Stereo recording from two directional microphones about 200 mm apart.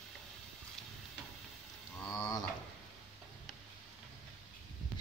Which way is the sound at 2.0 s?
20° left (ahead or behind).